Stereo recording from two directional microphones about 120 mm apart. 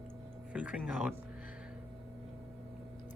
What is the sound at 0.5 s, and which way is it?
Speech, 10° right (ahead or behind).